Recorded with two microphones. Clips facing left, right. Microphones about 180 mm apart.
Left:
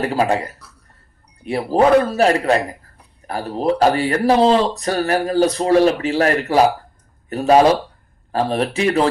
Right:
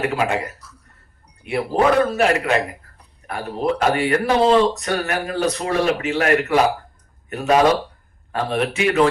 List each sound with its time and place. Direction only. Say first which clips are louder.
0.0 s speech: left 3 dB; 35° left (ahead or behind)